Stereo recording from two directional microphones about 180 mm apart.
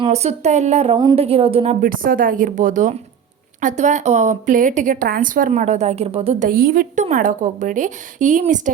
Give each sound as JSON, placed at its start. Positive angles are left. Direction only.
{"t": 0.0, "sound": "speech", "side_deg": -35}
{"t": 1.8, "sound": "a woman's voice", "side_deg": -50}
{"t": 6.5, "sound": "a woman's voice", "side_deg": -50}